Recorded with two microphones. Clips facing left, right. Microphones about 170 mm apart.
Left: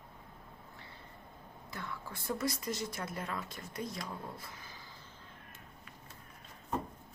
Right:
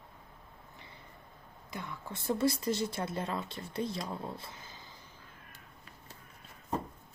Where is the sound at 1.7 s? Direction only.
20° right (ahead or behind).